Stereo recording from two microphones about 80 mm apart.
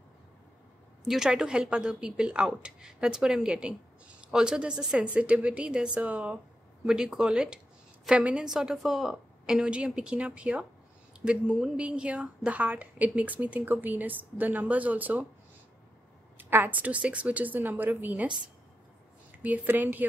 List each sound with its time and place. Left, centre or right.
1.0 s a woman's voice: centre; by 15.2 s right
16.3 s a woman's voice: right
19.3 s a woman's voice: right